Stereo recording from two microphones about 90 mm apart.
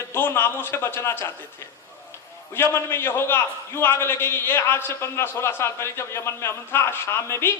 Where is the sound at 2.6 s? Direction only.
25° left (ahead or behind).